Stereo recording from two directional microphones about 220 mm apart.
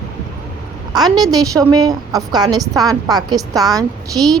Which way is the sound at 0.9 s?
20° right (ahead or behind).